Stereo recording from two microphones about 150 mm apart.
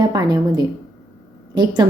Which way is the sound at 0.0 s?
25° right (ahead or behind).